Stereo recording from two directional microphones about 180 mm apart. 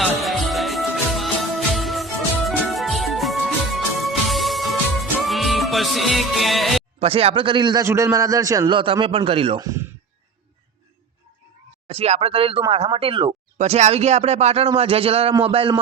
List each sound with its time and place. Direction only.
0.0 s music: centre (ahead or behind)
7.0 s a man's voice: 35° right (ahead or behind)
9.6 s a man's voice: 20° right (ahead or behind)
11.9 s speech: 35° right (ahead or behind)